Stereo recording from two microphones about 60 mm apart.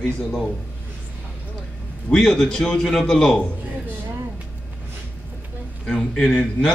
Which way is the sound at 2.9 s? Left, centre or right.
Centre.